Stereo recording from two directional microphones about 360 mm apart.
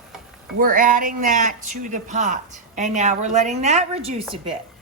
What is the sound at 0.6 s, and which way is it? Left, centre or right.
Speech, right.